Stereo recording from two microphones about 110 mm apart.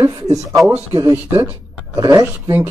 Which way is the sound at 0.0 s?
30° right (ahead or behind).